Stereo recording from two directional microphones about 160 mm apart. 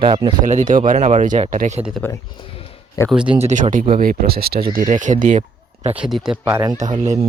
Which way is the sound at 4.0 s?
70° right (ahead or behind).